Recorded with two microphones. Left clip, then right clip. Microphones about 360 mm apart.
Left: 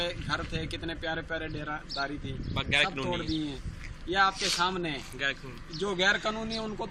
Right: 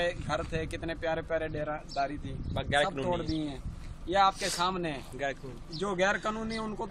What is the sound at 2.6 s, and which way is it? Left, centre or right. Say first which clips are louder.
Speech: left 1 dB; right.